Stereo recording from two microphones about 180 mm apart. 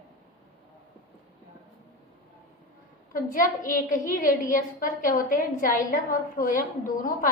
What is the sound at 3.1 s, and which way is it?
A woman's voice, 50° left (ahead or behind).